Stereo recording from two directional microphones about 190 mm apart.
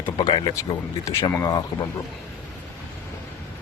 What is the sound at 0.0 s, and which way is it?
Speech, 20° left (ahead or behind).